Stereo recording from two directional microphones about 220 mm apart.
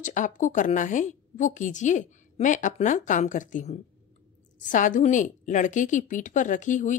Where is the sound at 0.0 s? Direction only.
35° left (ahead or behind).